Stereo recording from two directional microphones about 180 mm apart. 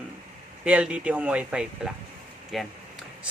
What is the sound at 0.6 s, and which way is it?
Speech, 5° right (ahead or behind).